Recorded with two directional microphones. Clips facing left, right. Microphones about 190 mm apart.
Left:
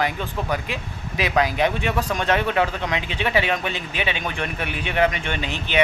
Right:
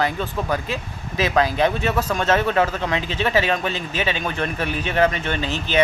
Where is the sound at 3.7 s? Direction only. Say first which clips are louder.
Right 2 dB; 40° right (ahead or behind).